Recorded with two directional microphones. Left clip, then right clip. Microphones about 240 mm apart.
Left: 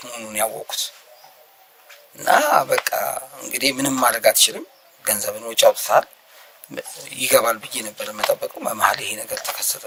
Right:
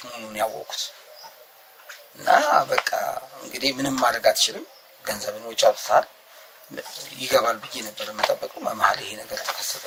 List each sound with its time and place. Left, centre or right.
0.0 s speech: left
2.1 s speech: left